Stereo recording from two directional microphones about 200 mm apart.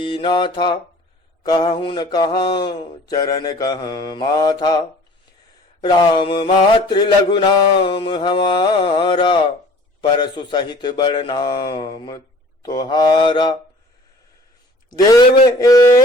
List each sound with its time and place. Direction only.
0.0 s mantra: 25° left (ahead or behind)
14.8 s mantra: 20° left (ahead or behind)